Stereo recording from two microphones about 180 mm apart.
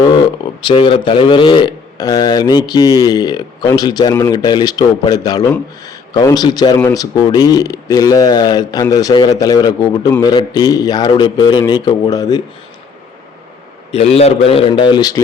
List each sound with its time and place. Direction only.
0.6 s a man's voice: 30° left (ahead or behind)
13.9 s a man's voice: 35° left (ahead or behind)